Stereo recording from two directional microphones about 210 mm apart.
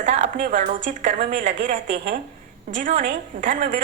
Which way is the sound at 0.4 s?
40° right (ahead or behind).